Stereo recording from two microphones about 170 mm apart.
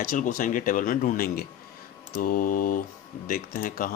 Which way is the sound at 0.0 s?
55° left (ahead or behind).